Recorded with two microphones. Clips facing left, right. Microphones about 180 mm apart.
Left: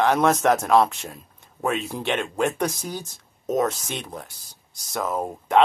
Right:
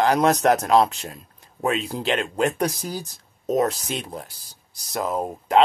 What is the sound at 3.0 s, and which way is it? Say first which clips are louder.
Speech: right 2 dB; centre (ahead or behind).